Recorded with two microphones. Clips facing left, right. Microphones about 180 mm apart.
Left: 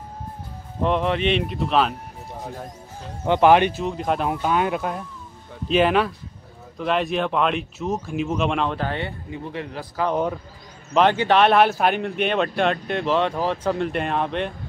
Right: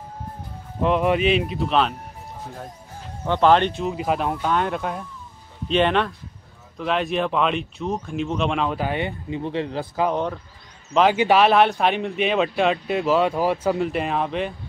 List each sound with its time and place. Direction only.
0.8 s speech: 5° right (ahead or behind)
3.3 s speech: 10° left (ahead or behind)
3.8 s speech: 5° right (ahead or behind)
9.4 s speech: 30° right (ahead or behind)
10.1 s speech: 5° left (ahead or behind)